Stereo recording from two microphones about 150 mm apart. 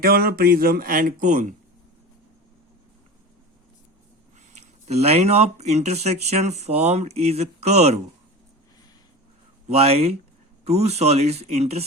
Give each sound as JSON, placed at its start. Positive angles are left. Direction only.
{"t": 0.0, "sound": "speech", "side_deg": -85}
{"t": 4.5, "sound": "speech", "side_deg": -45}
{"t": 9.6, "sound": "speech", "side_deg": -45}